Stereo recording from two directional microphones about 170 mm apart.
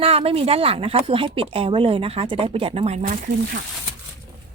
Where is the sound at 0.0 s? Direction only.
35° right (ahead or behind); by 3.6 s 55° right (ahead or behind).